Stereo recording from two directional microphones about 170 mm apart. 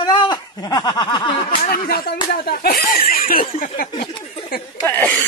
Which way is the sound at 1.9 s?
60° left (ahead or behind).